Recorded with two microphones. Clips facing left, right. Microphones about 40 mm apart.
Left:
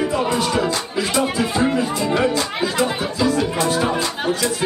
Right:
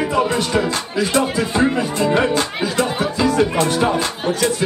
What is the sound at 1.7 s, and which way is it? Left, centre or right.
Music, right.